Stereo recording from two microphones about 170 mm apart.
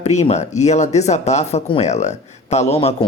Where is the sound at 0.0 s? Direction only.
40° left (ahead or behind).